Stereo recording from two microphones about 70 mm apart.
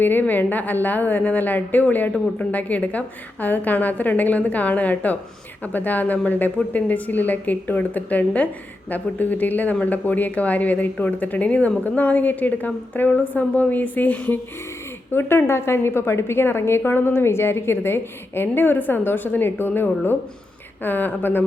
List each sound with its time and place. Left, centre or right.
0.0 s speech: left
15.1 s a woman's voice: left